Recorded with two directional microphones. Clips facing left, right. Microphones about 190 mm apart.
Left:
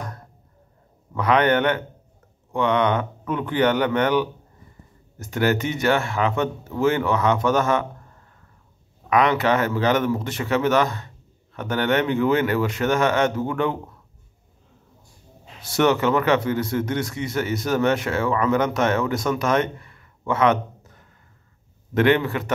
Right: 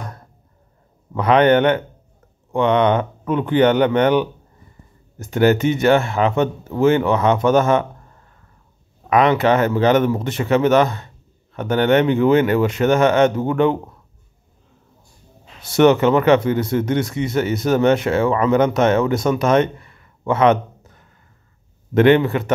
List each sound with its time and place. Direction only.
1.1 s speech: 25° right (ahead or behind)
9.1 s speech: 25° right (ahead or behind)
15.6 s speech: 20° right (ahead or behind)
21.9 s speech: 25° right (ahead or behind)